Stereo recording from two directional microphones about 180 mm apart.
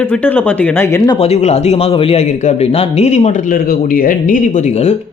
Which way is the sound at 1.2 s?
35° left (ahead or behind).